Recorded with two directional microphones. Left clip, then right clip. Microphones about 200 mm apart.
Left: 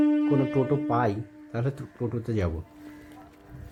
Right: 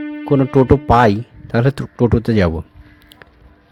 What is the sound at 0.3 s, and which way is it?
Speech, 40° right (ahead or behind).